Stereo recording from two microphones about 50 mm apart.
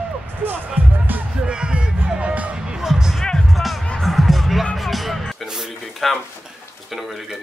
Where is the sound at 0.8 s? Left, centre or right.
Right.